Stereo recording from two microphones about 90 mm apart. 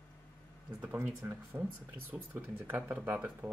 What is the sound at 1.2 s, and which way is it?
Speech, 25° right (ahead or behind).